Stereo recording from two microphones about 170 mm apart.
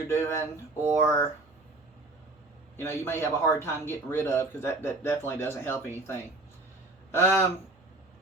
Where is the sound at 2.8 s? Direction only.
15° left (ahead or behind).